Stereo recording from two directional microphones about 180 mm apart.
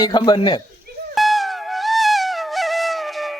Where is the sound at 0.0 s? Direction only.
25° left (ahead or behind).